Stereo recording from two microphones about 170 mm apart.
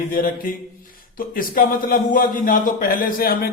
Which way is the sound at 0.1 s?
55° left (ahead or behind).